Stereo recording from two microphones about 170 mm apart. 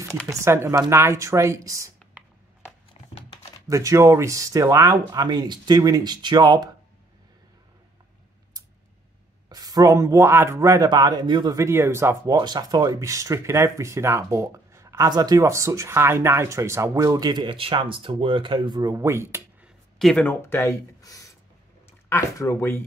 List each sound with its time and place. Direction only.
0.3 s speech: 15° right (ahead or behind)
3.6 s speech: 20° right (ahead or behind)
9.5 s speech: 25° right (ahead or behind)
20.0 s speech: 5° left (ahead or behind)